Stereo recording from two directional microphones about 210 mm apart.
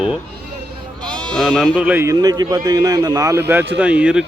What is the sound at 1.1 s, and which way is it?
Speech, 5° left (ahead or behind).